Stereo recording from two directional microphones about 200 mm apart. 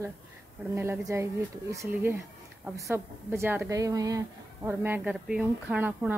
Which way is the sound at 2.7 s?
15° right (ahead or behind).